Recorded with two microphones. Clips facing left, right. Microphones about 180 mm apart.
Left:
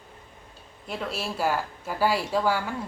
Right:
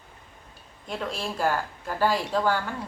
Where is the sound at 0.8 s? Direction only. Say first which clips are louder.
Even; 5° left (ahead or behind).